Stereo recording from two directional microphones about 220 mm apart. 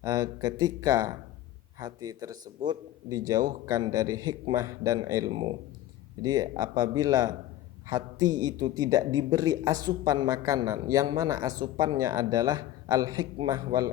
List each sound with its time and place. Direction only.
0.0 s speech: 15° right (ahead or behind)